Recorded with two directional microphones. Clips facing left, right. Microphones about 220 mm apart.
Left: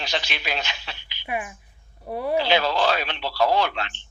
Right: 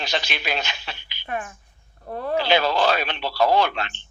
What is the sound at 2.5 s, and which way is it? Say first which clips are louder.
A man's voice: right 4 dB; 50° right (ahead or behind).